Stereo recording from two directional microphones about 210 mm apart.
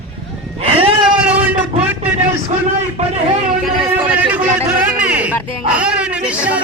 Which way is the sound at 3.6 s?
5° right (ahead or behind).